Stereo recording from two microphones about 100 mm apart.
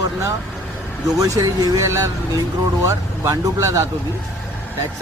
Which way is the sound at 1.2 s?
35° right (ahead or behind).